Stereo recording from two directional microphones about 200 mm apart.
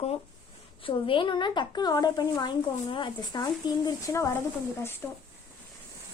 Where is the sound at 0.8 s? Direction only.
25° left (ahead or behind).